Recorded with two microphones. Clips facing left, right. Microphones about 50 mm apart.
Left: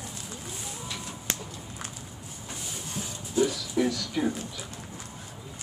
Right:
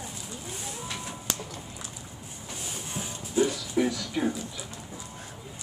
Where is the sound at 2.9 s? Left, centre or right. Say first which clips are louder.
Even; centre.